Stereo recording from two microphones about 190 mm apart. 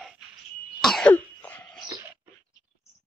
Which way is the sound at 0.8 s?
5° left (ahead or behind).